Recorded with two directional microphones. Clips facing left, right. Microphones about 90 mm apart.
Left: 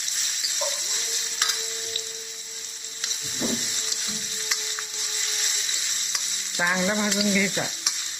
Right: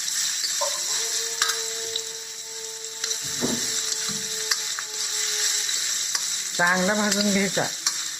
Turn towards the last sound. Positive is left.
turn(degrees=-35)  # may be behind; listen again after turning